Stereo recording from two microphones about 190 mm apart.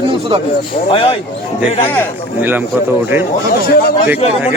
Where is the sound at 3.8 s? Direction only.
50° left (ahead or behind).